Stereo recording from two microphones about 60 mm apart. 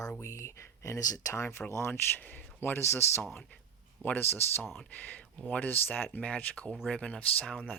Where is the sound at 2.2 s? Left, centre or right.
Left.